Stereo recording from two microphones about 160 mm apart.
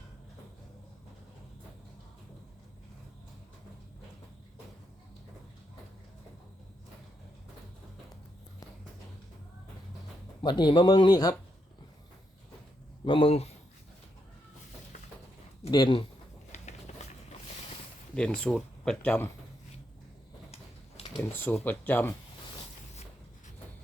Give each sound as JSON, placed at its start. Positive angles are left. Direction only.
{"t": 10.4, "sound": "speech", "side_deg": 30}
{"t": 13.1, "sound": "speech", "side_deg": 35}
{"t": 15.7, "sound": "speech", "side_deg": 30}
{"t": 16.5, "sound": "a sound", "side_deg": 45}
{"t": 18.1, "sound": "speech", "side_deg": 5}
{"t": 20.5, "sound": "a sound", "side_deg": 40}
{"t": 21.2, "sound": "speech", "side_deg": 10}